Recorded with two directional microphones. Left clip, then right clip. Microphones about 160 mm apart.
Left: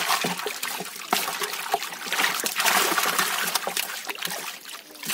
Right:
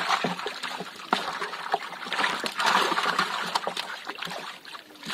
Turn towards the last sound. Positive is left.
turn(degrees=25)  # may be behind; listen again after turning